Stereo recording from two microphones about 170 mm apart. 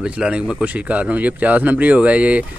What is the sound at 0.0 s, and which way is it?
Speech, 5° right (ahead or behind).